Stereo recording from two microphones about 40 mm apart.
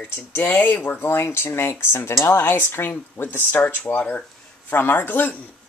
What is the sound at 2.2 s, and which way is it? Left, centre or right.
Speech, left.